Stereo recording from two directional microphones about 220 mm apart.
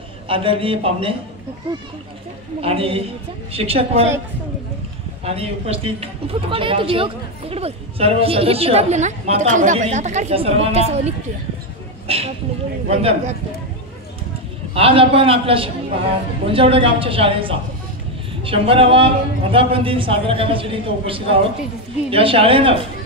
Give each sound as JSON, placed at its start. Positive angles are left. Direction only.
{"t": 0.3, "sound": "a woman's voice", "side_deg": -25}
{"t": 5.2, "sound": "a woman's voice", "side_deg": -25}
{"t": 14.7, "sound": "a woman's voice", "side_deg": -25}